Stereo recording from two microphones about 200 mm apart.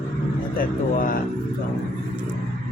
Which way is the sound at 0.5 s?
45° left (ahead or behind).